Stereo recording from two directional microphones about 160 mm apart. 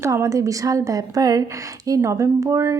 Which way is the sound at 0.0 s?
20° right (ahead or behind).